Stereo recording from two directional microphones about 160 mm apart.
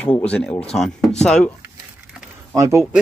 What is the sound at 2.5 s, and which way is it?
Speech, 20° right (ahead or behind).